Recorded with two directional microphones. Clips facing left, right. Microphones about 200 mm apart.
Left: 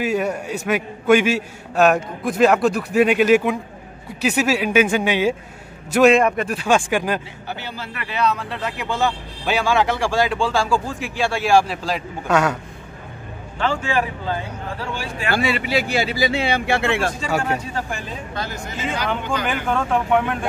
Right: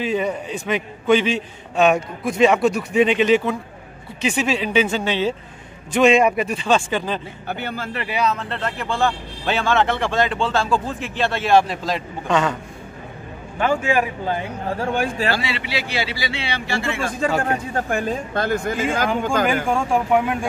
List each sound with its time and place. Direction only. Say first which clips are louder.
0.0 s a man's voice: left 1 dB; 10° left (ahead or behind)
7.4 s speech: right 3 dB; 55° right (ahead or behind)
8.1 s speech: left 1 dB; 5° right (ahead or behind)
13.6 s speech: right 2 dB; 15° right (ahead or behind)
14.8 s speech: right 9 dB; 50° right (ahead or behind)
15.3 s speech: left 5 dB; 50° left (ahead or behind); by 17.1 s 65° left (ahead or behind)
17.4 s speech: right 1 dB; 55° right (ahead or behind)
19.7 s speech: left 3 dB; 10° right (ahead or behind)